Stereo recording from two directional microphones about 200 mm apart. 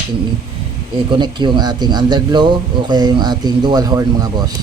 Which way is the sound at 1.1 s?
25° right (ahead or behind).